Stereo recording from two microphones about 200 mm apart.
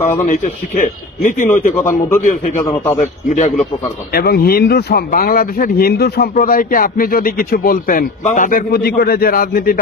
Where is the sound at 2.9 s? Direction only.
35° left (ahead or behind).